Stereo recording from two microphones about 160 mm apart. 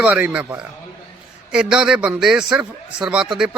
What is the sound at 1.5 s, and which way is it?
A man's voice, 5° right (ahead or behind).